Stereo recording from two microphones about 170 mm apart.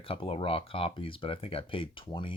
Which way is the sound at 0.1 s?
30° left (ahead or behind).